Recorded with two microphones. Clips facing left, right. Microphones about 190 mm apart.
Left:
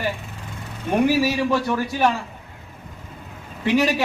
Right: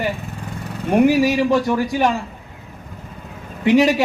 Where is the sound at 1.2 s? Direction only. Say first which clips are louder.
Right 4 dB; 15° right (ahead or behind).